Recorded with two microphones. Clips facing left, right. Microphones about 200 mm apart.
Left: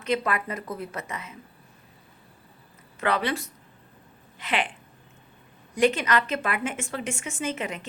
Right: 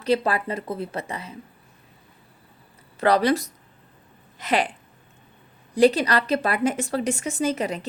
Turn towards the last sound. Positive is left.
turn(degrees=-35)  # may be behind; listen again after turning